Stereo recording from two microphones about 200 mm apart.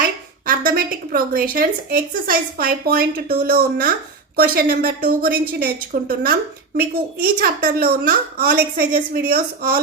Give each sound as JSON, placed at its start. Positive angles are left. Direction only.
{"t": 0.0, "sound": "a woman's voice", "side_deg": -45}